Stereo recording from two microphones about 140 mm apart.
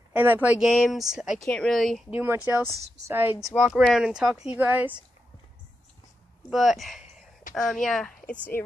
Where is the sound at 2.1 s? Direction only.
15° right (ahead or behind).